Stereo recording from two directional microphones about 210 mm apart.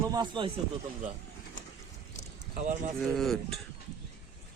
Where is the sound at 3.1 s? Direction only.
Centre (ahead or behind).